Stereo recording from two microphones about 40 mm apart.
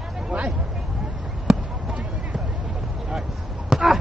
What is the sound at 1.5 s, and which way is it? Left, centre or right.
Basketball bounce, centre.